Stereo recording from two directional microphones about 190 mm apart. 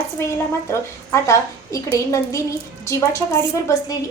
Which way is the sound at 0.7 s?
15° left (ahead or behind).